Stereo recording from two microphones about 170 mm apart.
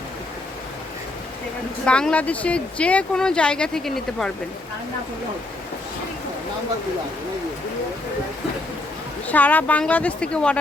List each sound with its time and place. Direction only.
1.8 s speech: 5° left (ahead or behind)
9.2 s speech: 10° left (ahead or behind)